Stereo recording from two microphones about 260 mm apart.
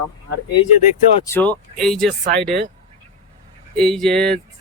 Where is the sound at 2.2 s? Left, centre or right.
Right.